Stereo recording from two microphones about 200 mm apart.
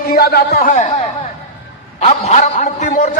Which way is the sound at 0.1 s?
50° left (ahead or behind).